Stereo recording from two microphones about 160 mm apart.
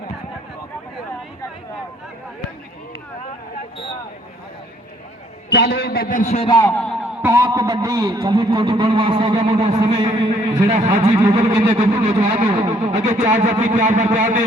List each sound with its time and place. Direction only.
5.5 s a man's voice: 90° left; by 6.4 s 50° left (ahead or behind)
6.4 s a man's voice: 25° left (ahead or behind)
6.7 s a man's voice: 10° left (ahead or behind)
7.2 s a sound: 15° right (ahead or behind)
7.4 s a man's voice: 25° right (ahead or behind)
8.3 s speech: 35° right (ahead or behind)